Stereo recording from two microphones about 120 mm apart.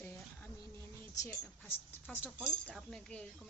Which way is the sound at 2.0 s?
10° left (ahead or behind).